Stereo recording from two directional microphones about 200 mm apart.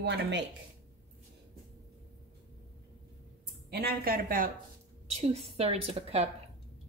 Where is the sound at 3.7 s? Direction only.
50° right (ahead or behind).